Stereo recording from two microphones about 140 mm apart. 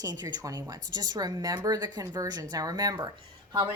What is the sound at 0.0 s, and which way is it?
A woman's voice, 30° right (ahead or behind).